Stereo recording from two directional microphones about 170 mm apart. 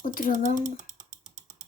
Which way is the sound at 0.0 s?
55° left (ahead or behind).